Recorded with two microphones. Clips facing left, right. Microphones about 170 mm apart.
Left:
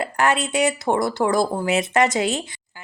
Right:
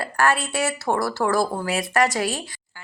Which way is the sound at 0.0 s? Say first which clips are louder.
Left 1 dB; 20° left (ahead or behind).